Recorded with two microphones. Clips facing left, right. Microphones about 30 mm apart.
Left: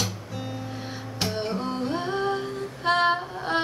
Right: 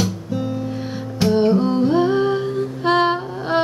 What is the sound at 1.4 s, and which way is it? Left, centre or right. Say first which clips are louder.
Music: right 14 dB; centre.